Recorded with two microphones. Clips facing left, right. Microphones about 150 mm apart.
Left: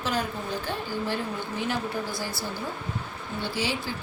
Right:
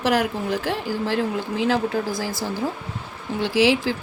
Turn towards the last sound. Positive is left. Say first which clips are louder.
# right 11 dB
turn(degrees=-90)